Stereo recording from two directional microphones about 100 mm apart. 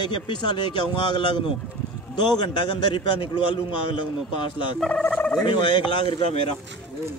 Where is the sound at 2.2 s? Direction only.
50° left (ahead or behind).